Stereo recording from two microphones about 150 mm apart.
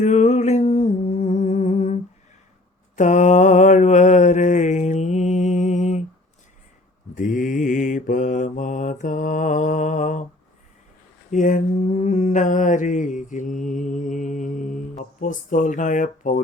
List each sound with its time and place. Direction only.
0.0 s music: 50° left (ahead or behind)
2.9 s mantra: 50° left (ahead or behind)
7.2 s mantra: 60° left (ahead or behind)
11.3 s mantra: 60° left (ahead or behind)